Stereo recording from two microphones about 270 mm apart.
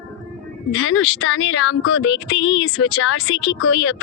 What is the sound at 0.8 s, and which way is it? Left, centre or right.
Speech, left.